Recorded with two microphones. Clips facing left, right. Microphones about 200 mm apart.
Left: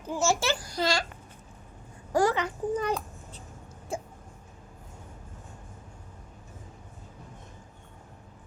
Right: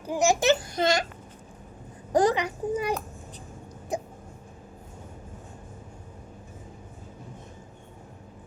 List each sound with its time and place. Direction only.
0.0 s a child's voice: 15° right (ahead or behind)
2.1 s a child's voice: 15° right (ahead or behind)
3.9 s hiccup: 20° right (ahead or behind)